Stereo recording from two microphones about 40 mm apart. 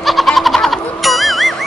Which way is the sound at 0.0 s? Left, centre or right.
Centre.